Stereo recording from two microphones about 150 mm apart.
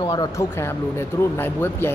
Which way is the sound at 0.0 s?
20° left (ahead or behind).